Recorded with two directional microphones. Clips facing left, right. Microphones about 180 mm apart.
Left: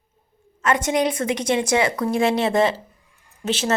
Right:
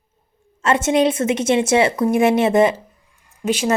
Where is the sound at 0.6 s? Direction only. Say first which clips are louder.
Right 4 dB; 25° right (ahead or behind).